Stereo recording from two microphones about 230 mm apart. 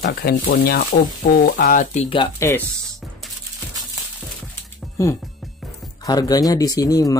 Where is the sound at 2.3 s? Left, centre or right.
Centre.